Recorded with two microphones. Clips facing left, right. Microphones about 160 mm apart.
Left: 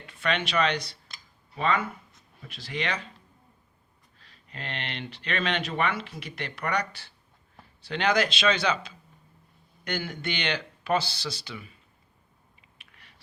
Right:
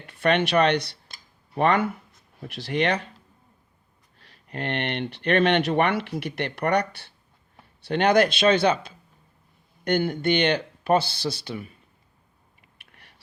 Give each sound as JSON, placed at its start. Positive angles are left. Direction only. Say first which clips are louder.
{"t": 0.0, "sound": "speech", "louder": "right 7 dB", "side_deg": -55}
{"t": 4.4, "sound": "speech", "louder": "right 9 dB", "side_deg": -60}